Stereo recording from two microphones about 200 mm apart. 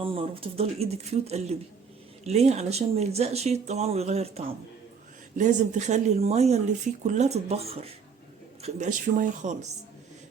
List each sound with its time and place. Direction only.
0.0 s speech: 25° right (ahead or behind)